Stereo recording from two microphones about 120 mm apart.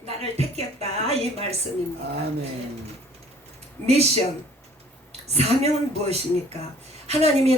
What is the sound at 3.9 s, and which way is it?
Speech, 60° right (ahead or behind).